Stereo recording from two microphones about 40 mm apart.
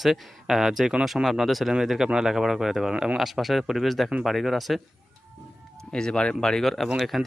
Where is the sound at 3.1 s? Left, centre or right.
Centre.